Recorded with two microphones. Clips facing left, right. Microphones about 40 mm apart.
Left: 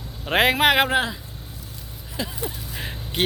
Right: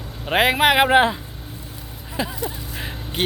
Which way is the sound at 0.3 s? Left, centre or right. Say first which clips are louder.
Right 1 dB; centre.